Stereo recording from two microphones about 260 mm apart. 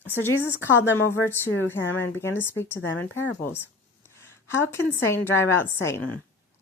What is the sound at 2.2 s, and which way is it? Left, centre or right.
Speech, centre.